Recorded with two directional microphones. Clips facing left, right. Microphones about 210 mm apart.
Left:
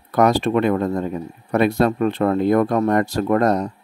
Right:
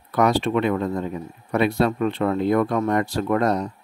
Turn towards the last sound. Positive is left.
turn(degrees=45)  # may be behind; listen again after turning